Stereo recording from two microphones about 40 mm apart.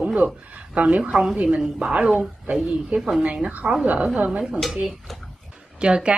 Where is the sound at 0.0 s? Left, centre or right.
Right.